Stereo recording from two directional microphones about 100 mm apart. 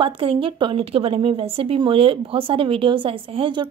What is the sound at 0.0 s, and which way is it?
A woman's voice, 65° right (ahead or behind).